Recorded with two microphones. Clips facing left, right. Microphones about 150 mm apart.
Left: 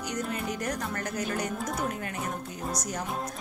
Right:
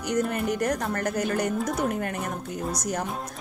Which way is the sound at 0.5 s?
55° right (ahead or behind).